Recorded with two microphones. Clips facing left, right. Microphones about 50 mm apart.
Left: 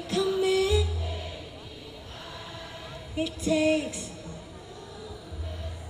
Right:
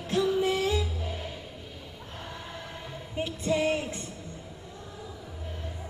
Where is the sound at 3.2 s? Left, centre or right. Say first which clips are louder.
Left 2 dB; right.